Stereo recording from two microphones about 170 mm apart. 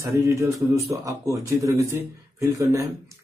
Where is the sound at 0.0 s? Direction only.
20° right (ahead or behind).